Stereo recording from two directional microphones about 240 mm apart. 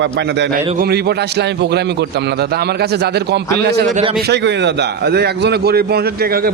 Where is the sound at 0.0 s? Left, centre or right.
Right.